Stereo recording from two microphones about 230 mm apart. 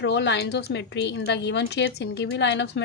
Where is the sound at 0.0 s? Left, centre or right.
Left.